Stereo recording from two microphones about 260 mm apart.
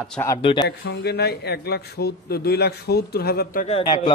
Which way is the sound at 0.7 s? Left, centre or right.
Left.